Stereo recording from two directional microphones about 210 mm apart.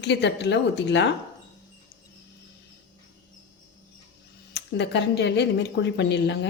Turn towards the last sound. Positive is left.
turn(degrees=55)  # may be behind; listen again after turning